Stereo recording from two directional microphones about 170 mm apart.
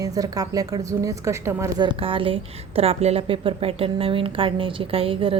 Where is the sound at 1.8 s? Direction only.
30° right (ahead or behind).